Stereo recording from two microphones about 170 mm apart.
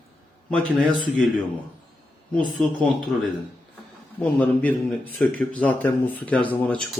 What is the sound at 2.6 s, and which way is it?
Speech, 5° left (ahead or behind).